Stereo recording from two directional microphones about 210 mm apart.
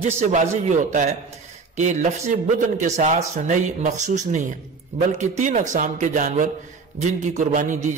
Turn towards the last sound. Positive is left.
turn(degrees=-35)  # may be behind; listen again after turning